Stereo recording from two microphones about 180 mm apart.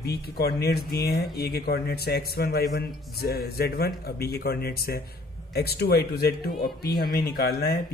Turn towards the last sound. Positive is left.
turn(degrees=60)  # may be behind; listen again after turning